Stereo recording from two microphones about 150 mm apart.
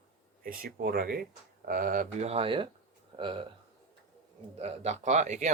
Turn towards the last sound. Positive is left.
turn(degrees=-50)  # may be behind; listen again after turning